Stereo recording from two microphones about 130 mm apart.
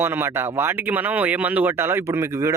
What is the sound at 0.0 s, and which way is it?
Speech, 15° right (ahead or behind).